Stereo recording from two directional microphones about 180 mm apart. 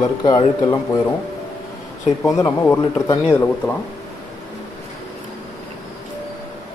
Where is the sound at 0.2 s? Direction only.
20° left (ahead or behind).